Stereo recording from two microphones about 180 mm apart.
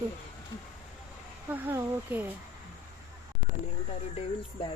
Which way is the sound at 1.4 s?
10° right (ahead or behind).